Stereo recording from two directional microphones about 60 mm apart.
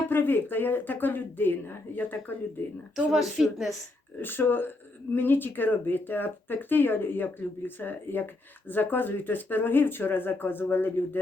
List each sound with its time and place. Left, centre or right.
0.1 s speech: left
2.9 s a woman's voice: centre
4.2 s speech: left